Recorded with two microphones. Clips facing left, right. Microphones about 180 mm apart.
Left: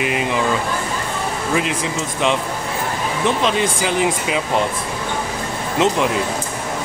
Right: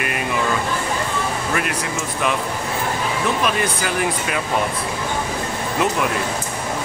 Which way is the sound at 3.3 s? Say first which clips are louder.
Left 4 dB; 20° left (ahead or behind).